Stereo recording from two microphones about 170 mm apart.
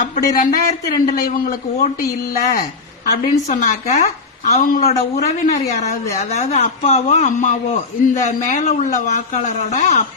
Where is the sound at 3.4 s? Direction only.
45° left (ahead or behind).